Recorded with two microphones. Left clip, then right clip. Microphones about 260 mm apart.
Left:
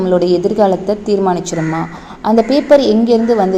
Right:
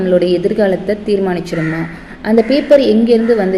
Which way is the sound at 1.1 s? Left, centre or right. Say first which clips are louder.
Left 2 dB; left.